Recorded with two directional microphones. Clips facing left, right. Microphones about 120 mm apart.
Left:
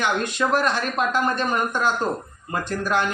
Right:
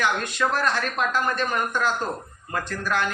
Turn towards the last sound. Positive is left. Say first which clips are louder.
# left 3 dB
turn(degrees=20)  # may be behind; listen again after turning